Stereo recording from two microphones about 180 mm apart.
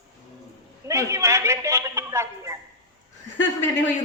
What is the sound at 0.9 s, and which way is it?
A man's voice, 15° right (ahead or behind).